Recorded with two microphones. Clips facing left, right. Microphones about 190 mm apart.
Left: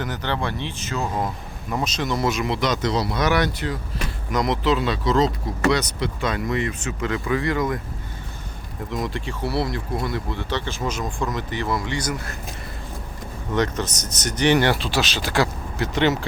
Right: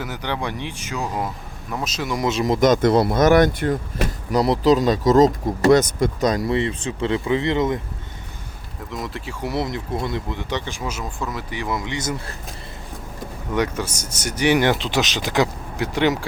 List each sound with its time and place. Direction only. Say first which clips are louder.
0.0 s speech: even; 10° right (ahead or behind)
1.7 s speech: left 1 dB; centre (ahead or behind)
2.3 s speech: right 6 dB; 40° right (ahead or behind)
4.3 s speech: right 5 dB; 35° right (ahead or behind)
8.9 s speech: left 3 dB; centre (ahead or behind)
9.4 s speech: right 1 dB; 20° right (ahead or behind)
13.5 s speech: even; 10° right (ahead or behind)